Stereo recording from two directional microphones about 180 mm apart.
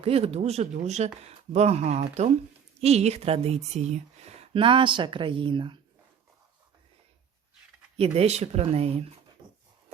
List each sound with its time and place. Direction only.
0.0 s a woman's voice: 35° right (ahead or behind)
7.9 s speech: 35° right (ahead or behind)
9.4 s a sound: 25° right (ahead or behind)